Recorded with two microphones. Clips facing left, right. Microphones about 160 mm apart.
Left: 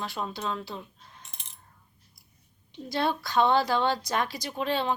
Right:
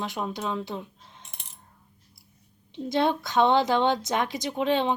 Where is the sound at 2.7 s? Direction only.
20° right (ahead or behind).